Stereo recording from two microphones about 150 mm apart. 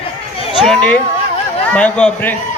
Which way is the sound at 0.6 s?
5° left (ahead or behind).